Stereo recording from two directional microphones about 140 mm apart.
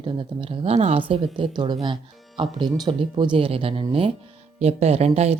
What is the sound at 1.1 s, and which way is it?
A woman's voice, 35° right (ahead or behind).